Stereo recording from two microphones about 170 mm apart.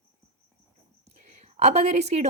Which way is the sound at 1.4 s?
40° right (ahead or behind).